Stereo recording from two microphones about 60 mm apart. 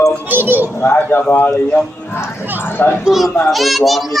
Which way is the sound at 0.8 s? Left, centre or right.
Left.